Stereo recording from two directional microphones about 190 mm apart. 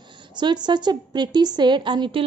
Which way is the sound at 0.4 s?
25° right (ahead or behind).